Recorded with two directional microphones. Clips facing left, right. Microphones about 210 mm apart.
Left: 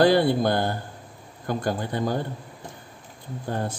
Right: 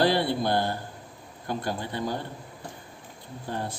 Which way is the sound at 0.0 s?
50° left (ahead or behind).